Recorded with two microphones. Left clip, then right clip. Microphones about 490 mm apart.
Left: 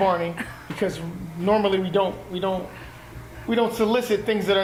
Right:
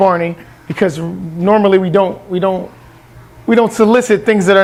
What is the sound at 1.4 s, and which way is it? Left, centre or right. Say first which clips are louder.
A woman's voice: right 11 dB; right.